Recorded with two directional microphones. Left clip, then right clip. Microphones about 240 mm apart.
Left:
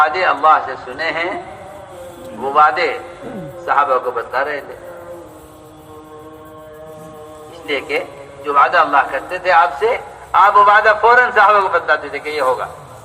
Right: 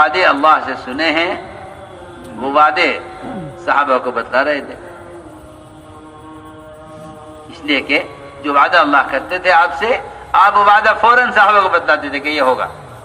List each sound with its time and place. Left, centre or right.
0.0 s a man's voice: right
2.4 s a man's voice: right
7.7 s a man's voice: right